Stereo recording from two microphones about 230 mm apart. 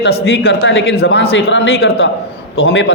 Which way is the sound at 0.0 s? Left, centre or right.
Left.